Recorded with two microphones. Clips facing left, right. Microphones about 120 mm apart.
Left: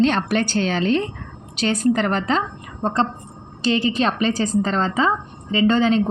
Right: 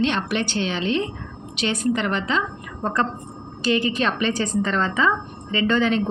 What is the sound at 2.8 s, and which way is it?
A woman's voice, 25° left (ahead or behind).